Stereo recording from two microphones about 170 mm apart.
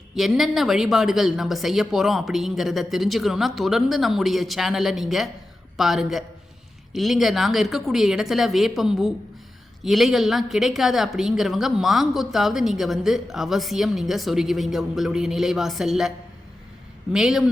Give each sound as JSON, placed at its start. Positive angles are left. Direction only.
{"t": 0.2, "sound": "speech", "side_deg": 0}